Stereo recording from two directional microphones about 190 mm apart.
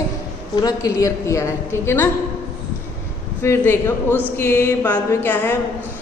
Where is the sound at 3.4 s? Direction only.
15° left (ahead or behind).